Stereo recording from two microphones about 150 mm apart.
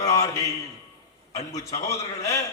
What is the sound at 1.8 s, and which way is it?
Speech, 20° left (ahead or behind).